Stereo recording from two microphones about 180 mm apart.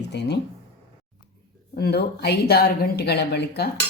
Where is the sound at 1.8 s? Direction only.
65° left (ahead or behind).